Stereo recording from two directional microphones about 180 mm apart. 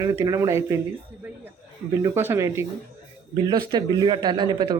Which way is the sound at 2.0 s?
15° right (ahead or behind).